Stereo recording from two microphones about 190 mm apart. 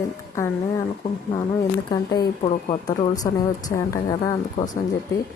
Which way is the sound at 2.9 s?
20° left (ahead or behind).